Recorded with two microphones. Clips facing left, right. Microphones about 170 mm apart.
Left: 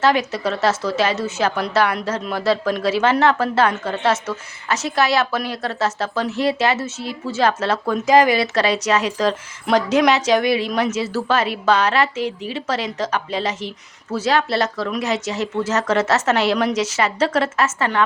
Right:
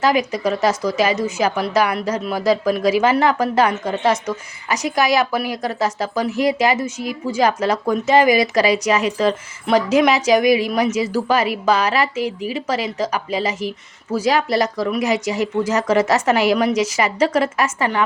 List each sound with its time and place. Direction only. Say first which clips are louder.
0.0 s a woman's voice: right 1 dB; 10° right (ahead or behind)
7.9 s a woman's voice: even; centre (ahead or behind)